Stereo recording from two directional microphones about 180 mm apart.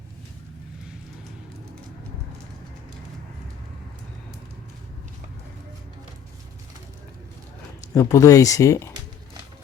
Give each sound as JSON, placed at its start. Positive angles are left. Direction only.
{"t": 7.9, "sound": "speech", "side_deg": 20}